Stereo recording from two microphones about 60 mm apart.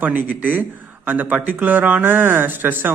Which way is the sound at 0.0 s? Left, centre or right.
Right.